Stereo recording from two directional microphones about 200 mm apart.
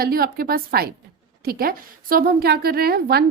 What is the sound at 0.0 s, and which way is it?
A woman's voice, 50° right (ahead or behind).